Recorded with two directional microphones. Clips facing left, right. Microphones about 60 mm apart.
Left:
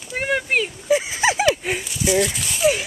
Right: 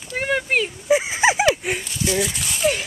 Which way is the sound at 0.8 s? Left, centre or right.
Right.